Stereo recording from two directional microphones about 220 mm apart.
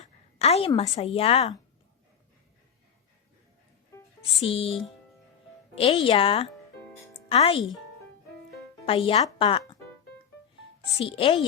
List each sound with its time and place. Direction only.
0.0 s a sound: 30° left (ahead or behind)
0.8 s a woman's voice: 25° left (ahead or behind)
4.2 s a woman's voice: 25° left (ahead or behind)
7.1 s music: 25° left (ahead or behind)
8.9 s speech: 25° left (ahead or behind)
10.9 s a woman's voice: 25° left (ahead or behind)